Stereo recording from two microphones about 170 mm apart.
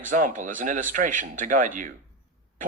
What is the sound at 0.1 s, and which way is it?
Speech, 50° right (ahead or behind).